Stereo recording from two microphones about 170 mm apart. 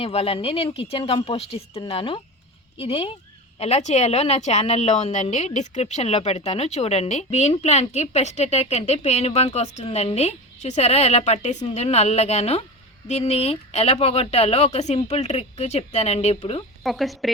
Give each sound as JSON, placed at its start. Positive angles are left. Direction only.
{"t": 0.0, "sound": "a woman's voice", "side_deg": 35}
{"t": 16.8, "sound": "speech", "side_deg": 0}